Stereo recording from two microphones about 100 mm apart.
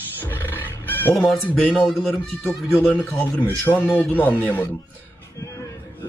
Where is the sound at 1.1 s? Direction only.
5° left (ahead or behind).